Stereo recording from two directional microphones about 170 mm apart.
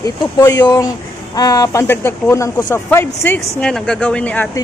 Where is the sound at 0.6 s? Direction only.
20° left (ahead or behind).